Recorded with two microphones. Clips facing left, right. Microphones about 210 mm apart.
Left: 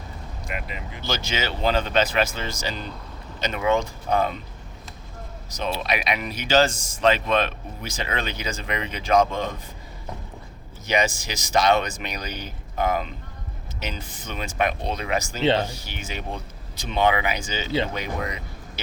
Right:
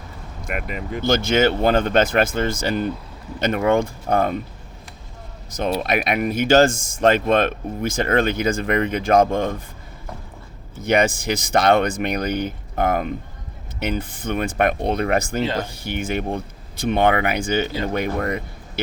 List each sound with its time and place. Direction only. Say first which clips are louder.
0.4 s speech: right 6 dB; 50° right (ahead or behind)
5.5 s speech: right 5 dB; 50° right (ahead or behind)
10.8 s speech: right 5 dB; 55° right (ahead or behind)